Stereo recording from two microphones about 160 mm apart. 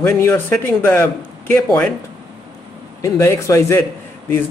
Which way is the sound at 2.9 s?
20° left (ahead or behind).